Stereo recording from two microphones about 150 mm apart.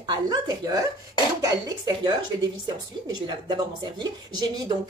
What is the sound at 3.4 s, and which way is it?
Speech, 30° right (ahead or behind).